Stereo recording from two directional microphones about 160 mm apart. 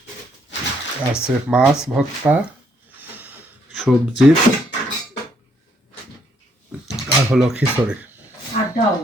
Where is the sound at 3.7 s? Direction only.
Centre (ahead or behind).